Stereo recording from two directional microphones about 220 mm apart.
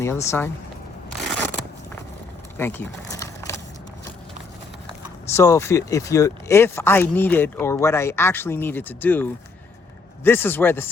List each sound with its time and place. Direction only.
0.0 s speech: 10° left (ahead or behind)
2.6 s a sound: 10° left (ahead or behind)
5.3 s speech: 15° left (ahead or behind)